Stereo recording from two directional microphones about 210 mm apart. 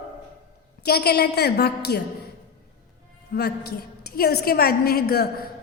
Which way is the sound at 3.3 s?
50° left (ahead or behind).